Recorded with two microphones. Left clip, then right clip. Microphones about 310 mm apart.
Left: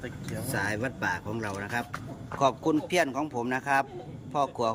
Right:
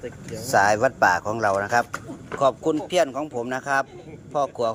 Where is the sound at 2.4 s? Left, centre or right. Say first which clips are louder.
Right 4 dB; centre.